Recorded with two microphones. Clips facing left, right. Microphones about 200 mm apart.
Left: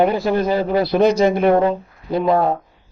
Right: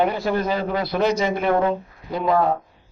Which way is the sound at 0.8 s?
30° left (ahead or behind).